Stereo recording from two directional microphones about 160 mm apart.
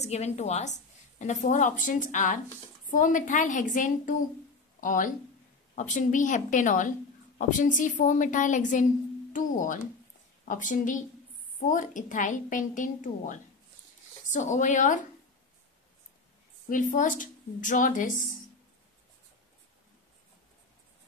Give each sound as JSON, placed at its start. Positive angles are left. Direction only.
{"t": 0.0, "sound": "a woman's voice", "side_deg": 45}
{"t": 9.3, "sound": "music", "side_deg": 55}
{"t": 10.4, "sound": "a woman's voice", "side_deg": 55}
{"t": 16.6, "sound": "a woman's voice", "side_deg": 55}